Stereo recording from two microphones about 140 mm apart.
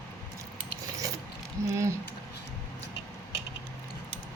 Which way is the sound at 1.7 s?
20° right (ahead or behind).